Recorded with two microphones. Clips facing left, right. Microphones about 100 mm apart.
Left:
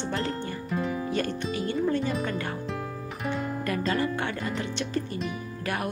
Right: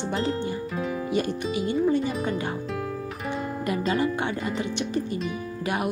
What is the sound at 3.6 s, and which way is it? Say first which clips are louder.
Speech: right 3 dB; 20° right (ahead or behind).